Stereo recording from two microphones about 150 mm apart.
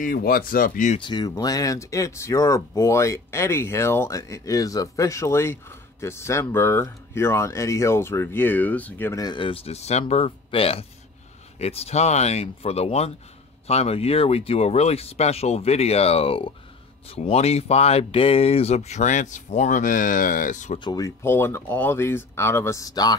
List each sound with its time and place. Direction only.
0.0 s speech: 75° left (ahead or behind)
0.9 s speech: 30° left (ahead or behind); by 9.2 s 15° left (ahead or behind)
9.2 s speech: 30° left (ahead or behind); by 20.8 s 55° left (ahead or behind)
20.8 s speech: 25° left (ahead or behind)